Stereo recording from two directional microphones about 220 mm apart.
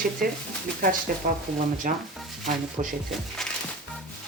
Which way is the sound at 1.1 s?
40° right (ahead or behind).